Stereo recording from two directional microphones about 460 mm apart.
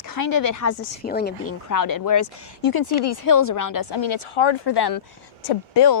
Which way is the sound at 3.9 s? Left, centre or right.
Left.